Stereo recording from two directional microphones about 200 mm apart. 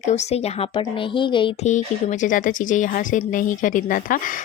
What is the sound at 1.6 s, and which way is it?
Speech, 35° left (ahead or behind).